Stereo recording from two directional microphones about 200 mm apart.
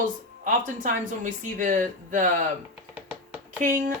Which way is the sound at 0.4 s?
40° right (ahead or behind).